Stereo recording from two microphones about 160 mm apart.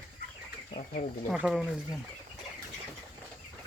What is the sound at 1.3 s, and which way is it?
Speech, 5° right (ahead or behind).